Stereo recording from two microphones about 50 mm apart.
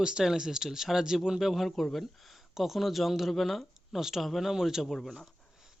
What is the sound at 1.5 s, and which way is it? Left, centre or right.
Speech, centre.